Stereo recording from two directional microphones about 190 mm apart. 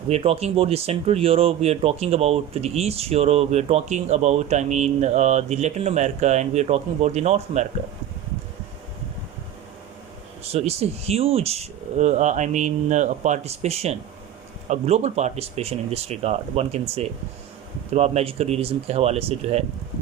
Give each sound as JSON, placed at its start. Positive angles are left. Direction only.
{"t": 0.1, "sound": "speech", "side_deg": -30}
{"t": 10.4, "sound": "speech", "side_deg": -30}